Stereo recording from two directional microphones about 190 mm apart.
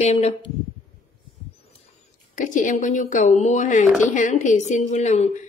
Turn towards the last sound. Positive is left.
turn(degrees=35)  # may be behind; listen again after turning